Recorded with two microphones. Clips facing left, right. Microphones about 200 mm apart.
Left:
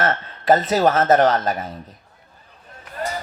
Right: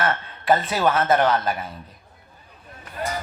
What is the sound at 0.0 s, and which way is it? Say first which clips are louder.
Speech: left 3 dB; 40° left (ahead or behind).